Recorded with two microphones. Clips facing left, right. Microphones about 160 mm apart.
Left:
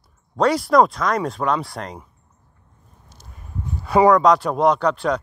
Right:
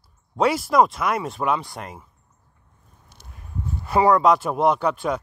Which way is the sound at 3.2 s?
65° right (ahead or behind).